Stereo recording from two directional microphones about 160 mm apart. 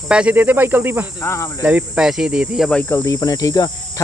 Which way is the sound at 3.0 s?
20° left (ahead or behind).